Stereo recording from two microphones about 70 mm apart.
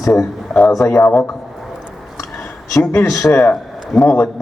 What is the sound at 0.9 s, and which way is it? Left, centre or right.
Speech, left.